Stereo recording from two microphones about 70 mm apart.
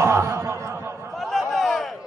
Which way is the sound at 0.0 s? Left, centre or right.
Right.